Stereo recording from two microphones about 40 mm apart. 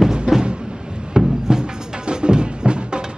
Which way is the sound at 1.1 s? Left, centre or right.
Right.